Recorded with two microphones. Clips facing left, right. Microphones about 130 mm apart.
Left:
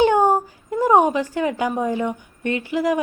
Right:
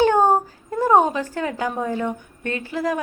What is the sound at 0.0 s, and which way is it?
Speech, 15° left (ahead or behind).